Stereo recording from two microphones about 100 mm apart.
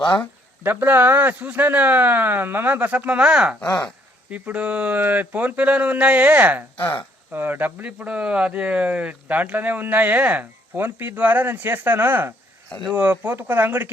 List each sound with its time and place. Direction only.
0.6 s speech: 20° right (ahead or behind)
3.6 s speech: 10° left (ahead or behind)
4.3 s speech: 15° right (ahead or behind)
6.7 s speech: 25° left (ahead or behind)
7.3 s speech: 20° right (ahead or behind)